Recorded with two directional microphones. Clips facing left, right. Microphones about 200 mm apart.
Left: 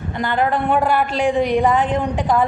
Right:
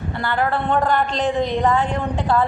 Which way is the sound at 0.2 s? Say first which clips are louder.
Left 3 dB; 20° left (ahead or behind).